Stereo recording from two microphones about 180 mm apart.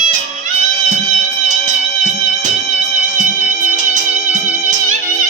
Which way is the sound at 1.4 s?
45° right (ahead or behind).